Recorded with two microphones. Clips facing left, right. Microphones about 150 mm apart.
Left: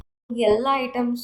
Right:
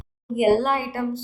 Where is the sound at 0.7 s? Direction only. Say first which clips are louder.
Left 2 dB; 20° left (ahead or behind).